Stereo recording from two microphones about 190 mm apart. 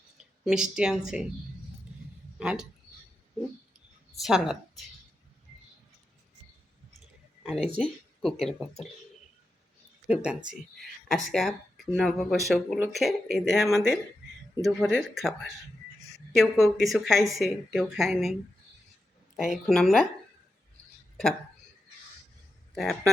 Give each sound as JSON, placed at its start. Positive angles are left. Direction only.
{"t": 0.2, "sound": "speech", "side_deg": -5}
{"t": 2.4, "sound": "speech", "side_deg": -5}
{"t": 4.2, "sound": "a woman's voice", "side_deg": -5}
{"t": 7.4, "sound": "speech", "side_deg": 0}
{"t": 10.1, "sound": "speech", "side_deg": -5}
{"t": 19.4, "sound": "speech", "side_deg": 0}
{"t": 22.7, "sound": "speech", "side_deg": 0}